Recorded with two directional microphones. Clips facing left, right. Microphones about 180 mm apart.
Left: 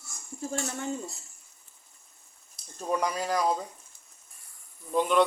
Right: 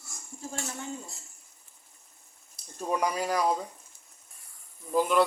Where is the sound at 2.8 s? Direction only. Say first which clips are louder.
Even; 10° right (ahead or behind).